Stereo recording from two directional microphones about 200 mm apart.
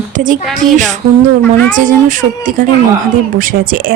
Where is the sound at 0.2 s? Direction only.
40° right (ahead or behind).